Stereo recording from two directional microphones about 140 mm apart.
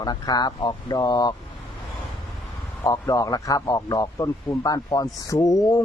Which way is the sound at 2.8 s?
25° left (ahead or behind).